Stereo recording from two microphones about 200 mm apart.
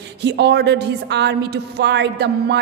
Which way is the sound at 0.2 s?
55° right (ahead or behind).